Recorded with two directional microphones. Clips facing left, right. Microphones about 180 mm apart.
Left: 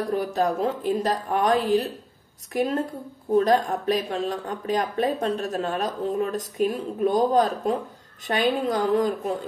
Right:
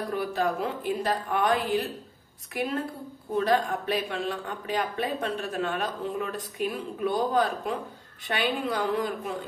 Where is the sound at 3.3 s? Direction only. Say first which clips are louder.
Left 5 dB; 40° left (ahead or behind).